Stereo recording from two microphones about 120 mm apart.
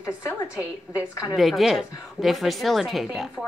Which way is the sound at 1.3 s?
Centre (ahead or behind).